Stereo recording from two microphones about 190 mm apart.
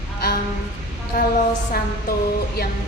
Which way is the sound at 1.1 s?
50° left (ahead or behind).